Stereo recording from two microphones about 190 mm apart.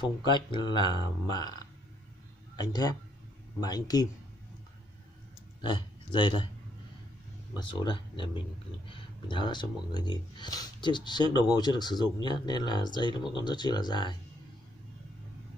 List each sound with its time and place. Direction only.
0.0 s a man's voice: 25° left (ahead or behind)
5.6 s speech: 25° left (ahead or behind)
7.5 s speech: 25° left (ahead or behind)